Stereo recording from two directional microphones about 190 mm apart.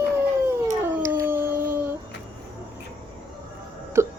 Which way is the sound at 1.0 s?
15° right (ahead or behind).